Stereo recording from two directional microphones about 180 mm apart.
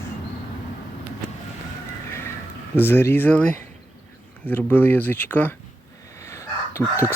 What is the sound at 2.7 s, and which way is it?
Speech, 10° left (ahead or behind).